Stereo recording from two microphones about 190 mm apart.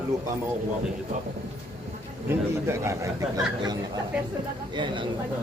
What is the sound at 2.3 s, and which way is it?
Speech, 15° right (ahead or behind).